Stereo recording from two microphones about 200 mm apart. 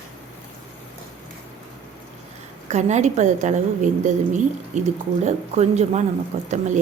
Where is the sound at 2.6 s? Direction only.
35° right (ahead or behind).